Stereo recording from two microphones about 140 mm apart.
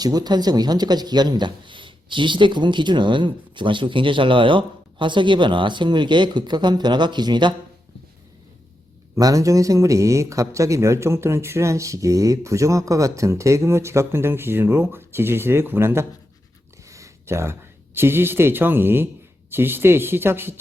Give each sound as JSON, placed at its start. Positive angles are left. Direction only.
{"t": 0.0, "sound": "speech", "side_deg": -30}
{"t": 9.1, "sound": "speech", "side_deg": -25}